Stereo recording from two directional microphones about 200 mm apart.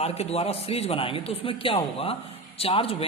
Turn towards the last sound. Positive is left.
turn(degrees=30)  # may be behind; listen again after turning